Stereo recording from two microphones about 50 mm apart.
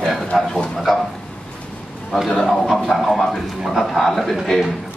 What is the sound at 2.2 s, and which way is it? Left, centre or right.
A man's voice, centre.